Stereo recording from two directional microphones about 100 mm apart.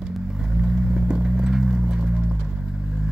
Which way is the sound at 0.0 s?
5° right (ahead or behind).